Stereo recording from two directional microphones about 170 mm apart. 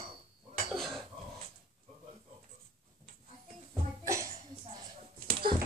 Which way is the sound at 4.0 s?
20° right (ahead or behind).